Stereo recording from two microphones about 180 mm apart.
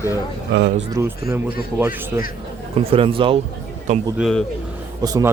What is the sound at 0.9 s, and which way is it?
Speech, 15° right (ahead or behind).